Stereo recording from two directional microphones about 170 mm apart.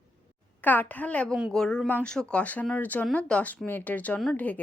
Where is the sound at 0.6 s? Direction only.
10° left (ahead or behind).